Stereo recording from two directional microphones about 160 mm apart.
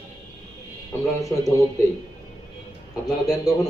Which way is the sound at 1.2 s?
20° left (ahead or behind).